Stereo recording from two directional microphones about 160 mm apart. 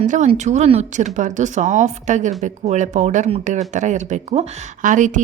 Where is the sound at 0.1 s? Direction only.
45° right (ahead or behind).